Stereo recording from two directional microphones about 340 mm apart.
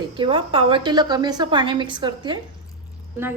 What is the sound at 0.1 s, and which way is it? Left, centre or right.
A woman's voice, centre.